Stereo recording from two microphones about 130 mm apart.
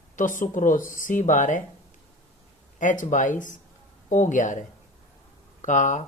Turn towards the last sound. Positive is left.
turn(degrees=75)  # may be behind; listen again after turning